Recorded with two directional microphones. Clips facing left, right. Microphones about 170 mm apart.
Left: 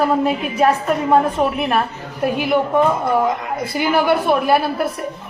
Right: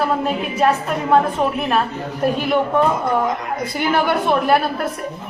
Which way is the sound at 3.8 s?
5° left (ahead or behind).